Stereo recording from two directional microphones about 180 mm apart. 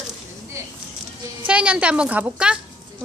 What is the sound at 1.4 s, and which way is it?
A woman's voice, 5° right (ahead or behind).